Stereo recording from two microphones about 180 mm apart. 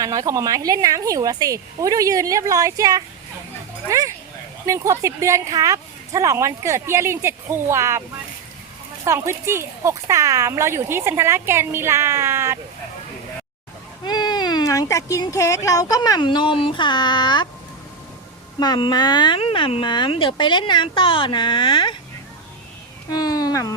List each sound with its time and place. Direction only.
0.0 s a woman's voice: 20° right (ahead or behind)
9.0 s speech: 15° right (ahead or behind)
14.0 s a sound: 25° left (ahead or behind)
15.1 s speech: 15° left (ahead or behind)
18.6 s speech: 25° left (ahead or behind)
23.1 s speech: 20° left (ahead or behind)